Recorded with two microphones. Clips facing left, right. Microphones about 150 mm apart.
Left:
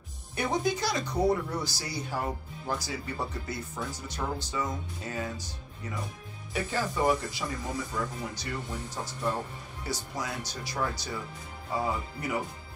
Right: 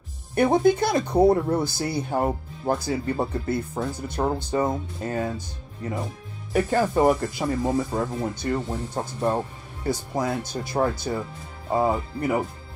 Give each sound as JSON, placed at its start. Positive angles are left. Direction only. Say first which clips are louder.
{"t": 0.3, "sound": "speech", "louder": "right 10 dB", "side_deg": -55}
{"t": 6.5, "sound": "speech", "louder": "right 10 dB", "side_deg": -50}